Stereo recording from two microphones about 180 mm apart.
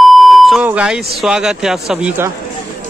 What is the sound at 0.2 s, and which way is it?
Beep, centre (ahead or behind).